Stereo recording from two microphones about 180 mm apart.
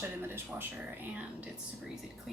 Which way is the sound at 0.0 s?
15° right (ahead or behind).